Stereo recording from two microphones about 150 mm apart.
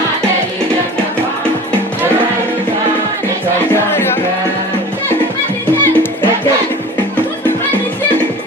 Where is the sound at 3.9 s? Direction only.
15° left (ahead or behind).